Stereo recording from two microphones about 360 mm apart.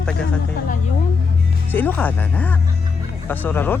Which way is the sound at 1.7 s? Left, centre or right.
Centre.